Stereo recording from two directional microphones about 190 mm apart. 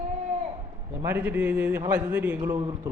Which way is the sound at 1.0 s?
10° right (ahead or behind).